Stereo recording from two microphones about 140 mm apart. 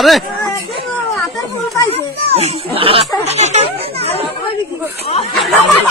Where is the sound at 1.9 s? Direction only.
50° right (ahead or behind).